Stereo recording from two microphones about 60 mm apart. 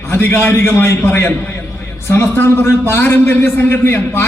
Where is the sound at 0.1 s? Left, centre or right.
Left.